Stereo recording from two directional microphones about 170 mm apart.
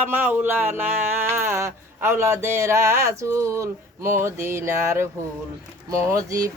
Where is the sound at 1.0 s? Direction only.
15° right (ahead or behind).